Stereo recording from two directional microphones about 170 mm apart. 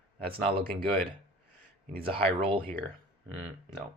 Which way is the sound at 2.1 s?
30° right (ahead or behind).